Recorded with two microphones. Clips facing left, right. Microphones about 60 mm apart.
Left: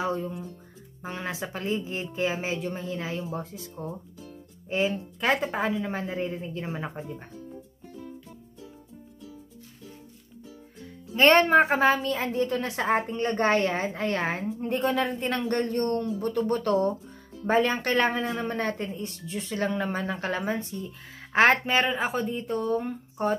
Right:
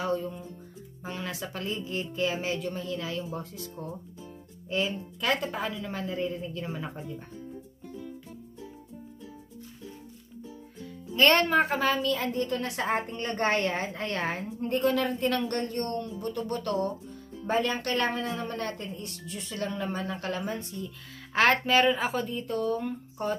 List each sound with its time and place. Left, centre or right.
0.0 s speech: left
4.6 s speech: left
11.1 s speech: left
14.8 s speech: centre